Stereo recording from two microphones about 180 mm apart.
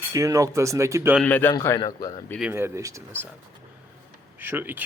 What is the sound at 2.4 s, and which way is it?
Speech, 10° right (ahead or behind).